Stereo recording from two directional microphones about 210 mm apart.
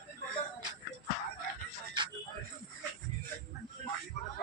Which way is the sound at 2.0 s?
20° right (ahead or behind).